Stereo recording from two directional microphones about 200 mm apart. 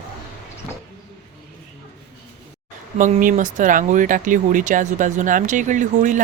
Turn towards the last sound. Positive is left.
turn(degrees=-40)  # may be behind; listen again after turning